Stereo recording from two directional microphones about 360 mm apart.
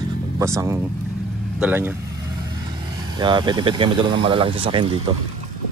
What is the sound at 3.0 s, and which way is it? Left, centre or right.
Speech, centre.